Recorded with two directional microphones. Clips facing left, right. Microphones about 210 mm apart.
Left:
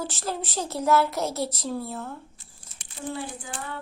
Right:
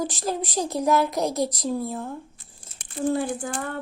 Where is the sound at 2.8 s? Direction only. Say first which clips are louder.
Right 9 dB; 50° right (ahead or behind).